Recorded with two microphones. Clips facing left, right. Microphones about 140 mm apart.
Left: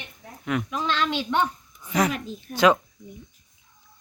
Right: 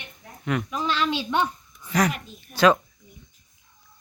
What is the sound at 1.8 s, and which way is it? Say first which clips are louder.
Speech: even; 20° left (ahead or behind).